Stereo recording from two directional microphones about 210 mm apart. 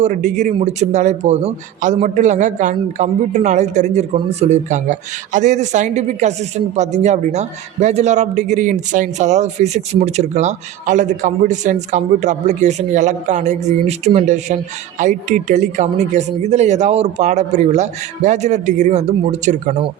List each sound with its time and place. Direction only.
0.0 s a man's voice: 35° right (ahead or behind)